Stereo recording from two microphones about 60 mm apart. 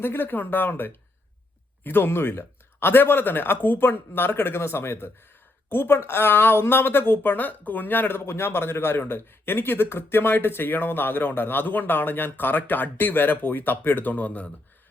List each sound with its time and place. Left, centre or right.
0.0 s speech: left